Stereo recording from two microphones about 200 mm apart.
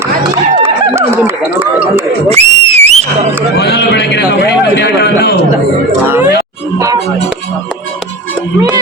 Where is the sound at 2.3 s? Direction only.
35° right (ahead or behind).